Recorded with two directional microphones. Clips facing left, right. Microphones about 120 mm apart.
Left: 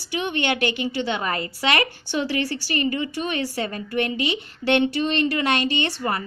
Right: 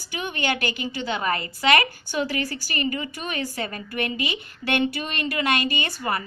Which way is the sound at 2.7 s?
35° left (ahead or behind).